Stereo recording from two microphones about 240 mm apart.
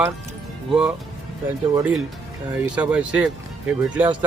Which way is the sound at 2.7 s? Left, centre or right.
Centre.